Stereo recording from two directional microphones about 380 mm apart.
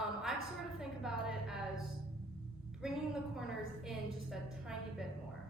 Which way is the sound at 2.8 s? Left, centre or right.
Centre.